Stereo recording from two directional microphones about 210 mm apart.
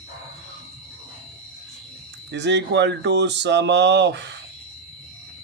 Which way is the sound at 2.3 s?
55° right (ahead or behind).